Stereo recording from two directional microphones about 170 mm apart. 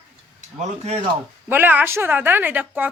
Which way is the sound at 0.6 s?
40° right (ahead or behind).